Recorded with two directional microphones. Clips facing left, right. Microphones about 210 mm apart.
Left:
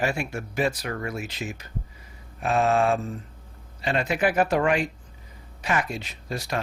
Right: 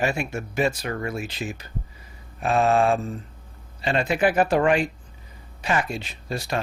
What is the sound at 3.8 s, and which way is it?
Speech, 30° right (ahead or behind).